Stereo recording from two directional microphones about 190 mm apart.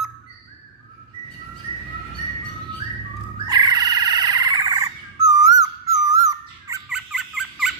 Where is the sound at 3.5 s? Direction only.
20° right (ahead or behind).